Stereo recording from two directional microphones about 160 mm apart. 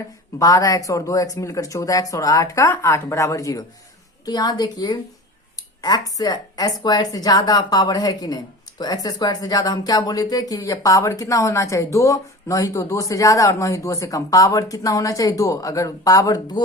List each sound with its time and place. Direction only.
0.3 s speech: 20° left (ahead or behind)